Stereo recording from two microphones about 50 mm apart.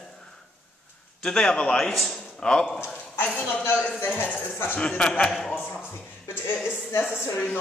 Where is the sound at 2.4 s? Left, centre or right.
Centre.